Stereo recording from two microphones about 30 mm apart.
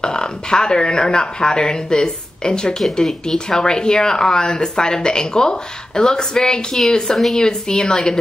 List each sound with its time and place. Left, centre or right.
0.0 s speech: left
3.0 s speech: centre